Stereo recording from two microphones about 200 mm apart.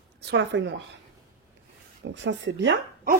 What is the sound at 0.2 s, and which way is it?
Speech, 60° right (ahead or behind).